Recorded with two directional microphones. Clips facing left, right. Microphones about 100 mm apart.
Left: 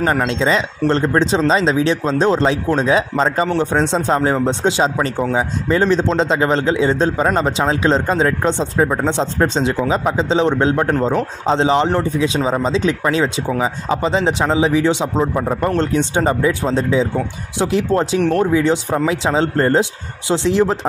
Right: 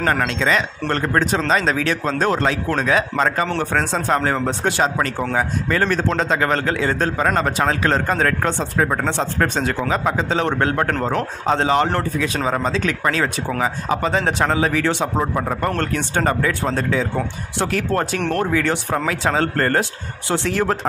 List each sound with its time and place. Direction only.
0.3 s speech: 30° left (ahead or behind); by 5.5 s 10° left (ahead or behind)
5.7 s speech: 20° left (ahead or behind)
18.2 s speech: 5° left (ahead or behind)
18.5 s speech: 15° left (ahead or behind)